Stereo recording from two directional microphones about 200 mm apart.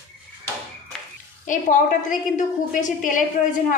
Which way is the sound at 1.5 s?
40° left (ahead or behind).